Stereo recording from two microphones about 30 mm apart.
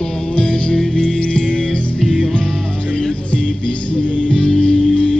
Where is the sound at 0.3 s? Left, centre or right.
Left.